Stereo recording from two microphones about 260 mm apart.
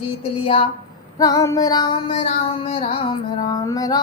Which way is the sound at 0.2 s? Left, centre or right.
Left.